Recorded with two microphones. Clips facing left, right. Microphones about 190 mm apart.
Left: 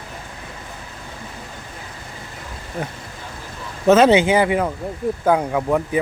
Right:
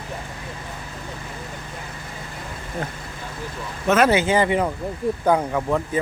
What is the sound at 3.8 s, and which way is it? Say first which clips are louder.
Speech: left 5 dB; 25° left (ahead or behind).